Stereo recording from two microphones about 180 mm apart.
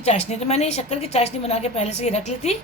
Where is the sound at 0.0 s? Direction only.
40° left (ahead or behind).